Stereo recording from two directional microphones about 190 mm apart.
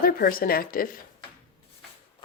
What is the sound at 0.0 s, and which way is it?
Speech, 50° left (ahead or behind).